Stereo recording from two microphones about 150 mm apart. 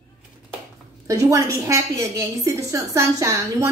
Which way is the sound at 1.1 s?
20° right (ahead or behind).